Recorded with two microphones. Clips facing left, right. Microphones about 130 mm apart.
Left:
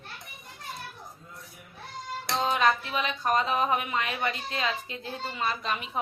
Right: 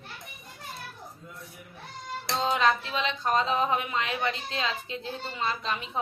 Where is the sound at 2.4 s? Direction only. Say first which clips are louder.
Even; 20° right (ahead or behind).